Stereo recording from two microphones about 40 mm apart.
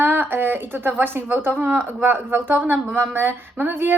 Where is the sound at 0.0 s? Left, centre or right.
Right.